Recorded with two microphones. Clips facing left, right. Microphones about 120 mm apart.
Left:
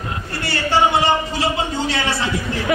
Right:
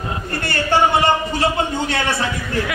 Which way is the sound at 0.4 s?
50° right (ahead or behind).